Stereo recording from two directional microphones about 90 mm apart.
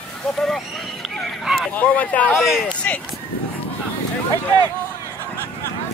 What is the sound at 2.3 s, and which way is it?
Speech, centre (ahead or behind).